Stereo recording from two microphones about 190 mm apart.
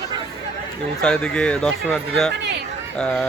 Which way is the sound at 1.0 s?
5° left (ahead or behind).